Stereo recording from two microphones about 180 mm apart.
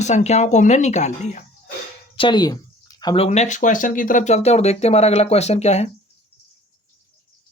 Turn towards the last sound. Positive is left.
turn(degrees=35)  # may be behind; listen again after turning